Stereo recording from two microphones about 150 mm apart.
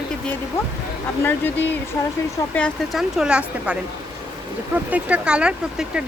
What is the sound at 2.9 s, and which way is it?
Speech, 5° right (ahead or behind).